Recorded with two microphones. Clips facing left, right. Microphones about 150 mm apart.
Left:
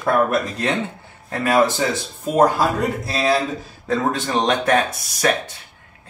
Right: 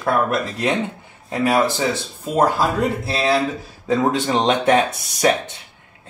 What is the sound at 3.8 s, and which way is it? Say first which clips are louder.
Speech: right 3 dB; 15° right (ahead or behind).